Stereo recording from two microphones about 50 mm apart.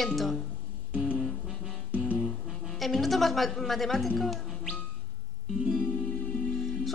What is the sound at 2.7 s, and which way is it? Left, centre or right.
Speech, centre.